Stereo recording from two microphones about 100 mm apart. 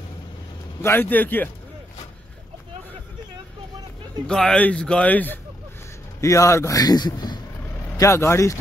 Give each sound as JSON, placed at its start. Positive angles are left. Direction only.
{"t": 0.8, "sound": "a man's voice", "side_deg": 20}
{"t": 4.3, "sound": "speech", "side_deg": 10}
{"t": 6.2, "sound": "a man's voice", "side_deg": 30}
{"t": 8.0, "sound": "a man's voice", "side_deg": 30}